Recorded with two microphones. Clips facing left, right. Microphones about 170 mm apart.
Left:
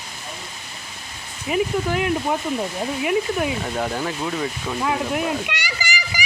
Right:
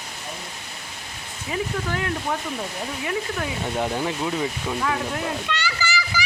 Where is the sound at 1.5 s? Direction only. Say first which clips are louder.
Left 6 dB; 15° left (ahead or behind).